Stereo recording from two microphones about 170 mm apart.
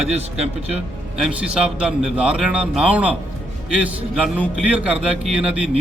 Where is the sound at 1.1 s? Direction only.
5° right (ahead or behind).